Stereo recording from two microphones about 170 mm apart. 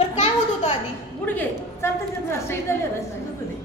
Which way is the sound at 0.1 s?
35° left (ahead or behind).